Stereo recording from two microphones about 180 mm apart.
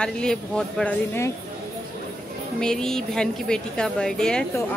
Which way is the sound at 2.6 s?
5° left (ahead or behind).